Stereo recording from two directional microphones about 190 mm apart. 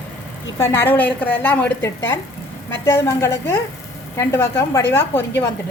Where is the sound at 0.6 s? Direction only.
10° left (ahead or behind).